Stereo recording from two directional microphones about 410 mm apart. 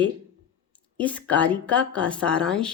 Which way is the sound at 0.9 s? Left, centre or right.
Centre.